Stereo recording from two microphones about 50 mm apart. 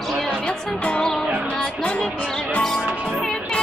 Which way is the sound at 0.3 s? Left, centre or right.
Left.